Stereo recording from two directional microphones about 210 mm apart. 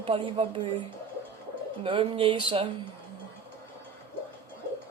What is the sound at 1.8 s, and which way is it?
Speech, 25° right (ahead or behind).